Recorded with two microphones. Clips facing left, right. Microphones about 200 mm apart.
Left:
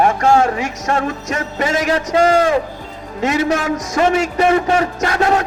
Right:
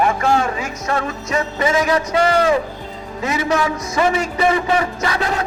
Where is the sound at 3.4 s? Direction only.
50° left (ahead or behind).